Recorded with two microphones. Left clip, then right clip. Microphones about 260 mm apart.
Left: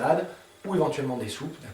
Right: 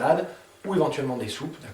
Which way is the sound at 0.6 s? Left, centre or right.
Right.